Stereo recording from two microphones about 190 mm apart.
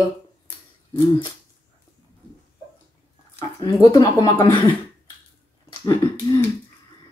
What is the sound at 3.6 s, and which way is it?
Speech, 20° left (ahead or behind).